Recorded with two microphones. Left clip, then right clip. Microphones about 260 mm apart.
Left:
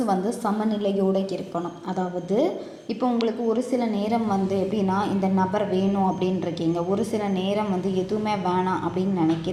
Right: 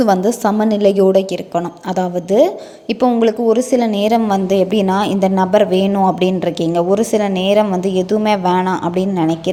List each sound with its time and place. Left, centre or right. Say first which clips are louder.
0.0 s a woman's voice: right 11 dB; right